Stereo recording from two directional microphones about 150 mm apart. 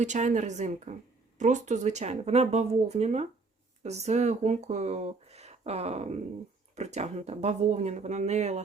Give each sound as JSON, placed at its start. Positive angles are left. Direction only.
{"t": 0.0, "sound": "speech", "side_deg": -55}